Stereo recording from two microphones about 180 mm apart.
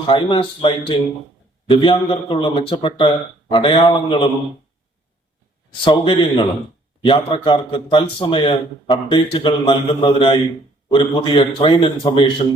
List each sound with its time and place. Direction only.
0.0 s a man's voice: 30° left (ahead or behind)
5.8 s a man's voice: 30° left (ahead or behind)